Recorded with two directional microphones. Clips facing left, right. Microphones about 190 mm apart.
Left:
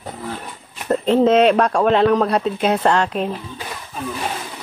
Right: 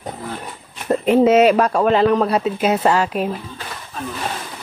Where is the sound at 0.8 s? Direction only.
10° right (ahead or behind).